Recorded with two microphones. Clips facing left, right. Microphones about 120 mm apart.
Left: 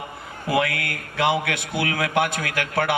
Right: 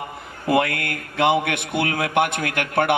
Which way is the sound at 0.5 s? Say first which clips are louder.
Right 3 dB; 50° right (ahead or behind).